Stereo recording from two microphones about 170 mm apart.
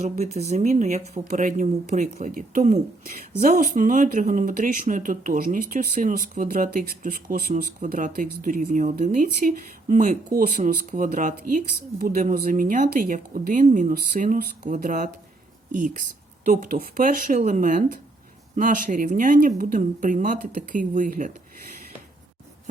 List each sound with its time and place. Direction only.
0.2 s speech: 40° right (ahead or behind)